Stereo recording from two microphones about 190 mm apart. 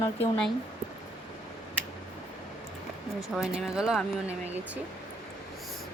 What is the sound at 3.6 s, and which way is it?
Speech, 5° right (ahead or behind).